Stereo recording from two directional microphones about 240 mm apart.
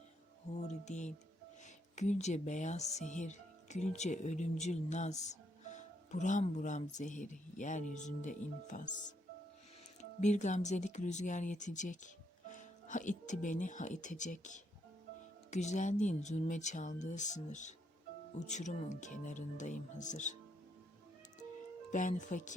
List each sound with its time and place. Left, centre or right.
0.5 s music: left
1.6 s speech: left
21.9 s speech: left